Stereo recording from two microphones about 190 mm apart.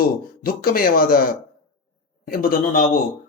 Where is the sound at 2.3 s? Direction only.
50° left (ahead or behind).